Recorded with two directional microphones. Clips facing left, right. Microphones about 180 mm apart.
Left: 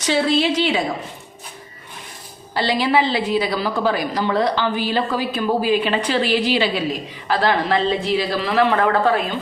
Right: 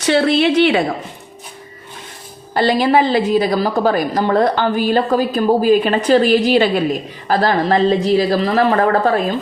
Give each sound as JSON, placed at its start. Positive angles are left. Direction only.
{"t": 0.0, "sound": "a woman's voice", "side_deg": -60}
{"t": 2.6, "sound": "a woman's voice", "side_deg": -45}